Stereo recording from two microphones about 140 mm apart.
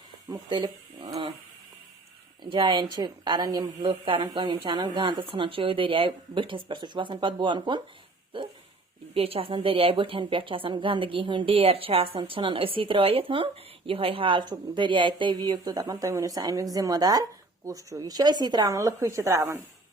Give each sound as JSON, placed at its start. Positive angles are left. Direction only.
{"t": 0.3, "sound": "a woman's voice", "side_deg": -30}
{"t": 2.4, "sound": "a woman's voice", "side_deg": -35}
{"t": 9.1, "sound": "a woman's voice", "side_deg": -45}